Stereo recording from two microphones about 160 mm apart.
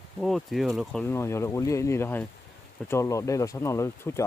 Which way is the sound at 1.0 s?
15° left (ahead or behind).